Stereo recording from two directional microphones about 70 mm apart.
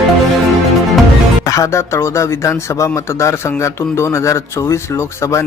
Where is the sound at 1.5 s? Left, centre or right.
Left.